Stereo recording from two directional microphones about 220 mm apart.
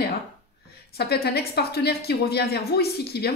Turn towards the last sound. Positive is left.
turn(degrees=45)  # may be behind; listen again after turning